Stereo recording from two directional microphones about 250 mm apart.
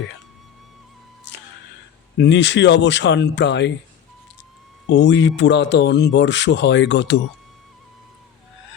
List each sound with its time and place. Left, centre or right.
2.1 s speech: left
4.9 s speech: left